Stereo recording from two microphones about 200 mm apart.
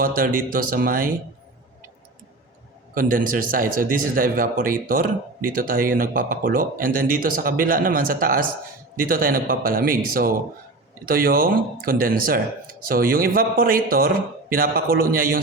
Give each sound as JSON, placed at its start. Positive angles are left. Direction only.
{"t": 0.0, "sound": "a man's voice", "side_deg": -45}
{"t": 2.9, "sound": "a man's voice", "side_deg": -45}